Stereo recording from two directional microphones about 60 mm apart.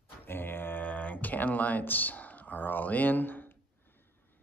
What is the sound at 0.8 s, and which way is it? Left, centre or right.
Speech, left.